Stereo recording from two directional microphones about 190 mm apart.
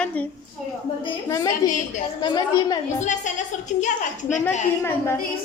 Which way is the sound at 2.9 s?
40° left (ahead or behind).